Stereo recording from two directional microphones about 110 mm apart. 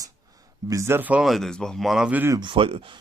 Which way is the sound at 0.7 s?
25° right (ahead or behind).